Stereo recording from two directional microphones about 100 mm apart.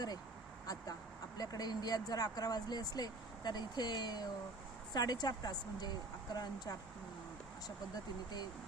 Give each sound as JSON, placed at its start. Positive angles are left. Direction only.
{"t": 1.4, "sound": "a woman's voice", "side_deg": 40}
{"t": 7.9, "sound": "a woman's voice", "side_deg": 45}